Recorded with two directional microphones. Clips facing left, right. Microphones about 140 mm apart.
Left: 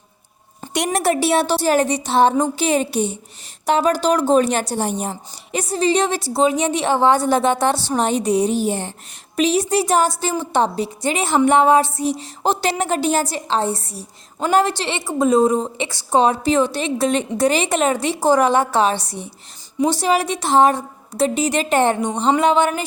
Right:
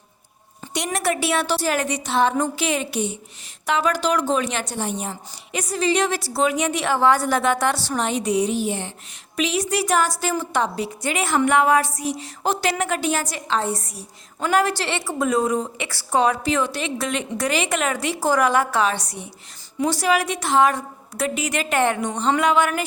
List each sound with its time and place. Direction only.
0.9 s a woman's voice: 35° left (ahead or behind)